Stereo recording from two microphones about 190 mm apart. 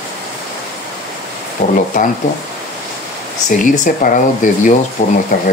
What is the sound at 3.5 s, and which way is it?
Speech, 45° left (ahead or behind).